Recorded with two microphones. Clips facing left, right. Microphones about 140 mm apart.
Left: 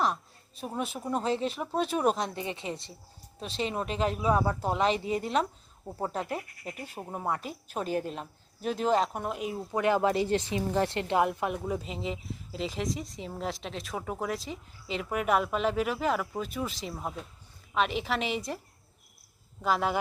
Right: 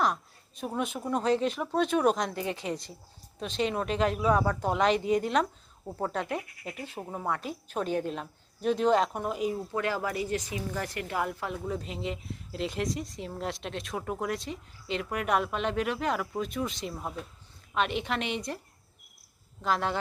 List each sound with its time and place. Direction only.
0.6 s a woman's voice: 5° left (ahead or behind)
9.7 s a woman's voice: 20° left (ahead or behind)
11.9 s a woman's voice: centre (ahead or behind)
19.6 s a woman's voice: 5° left (ahead or behind)